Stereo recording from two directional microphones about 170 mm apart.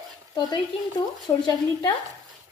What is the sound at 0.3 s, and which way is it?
Speech, 25° left (ahead or behind).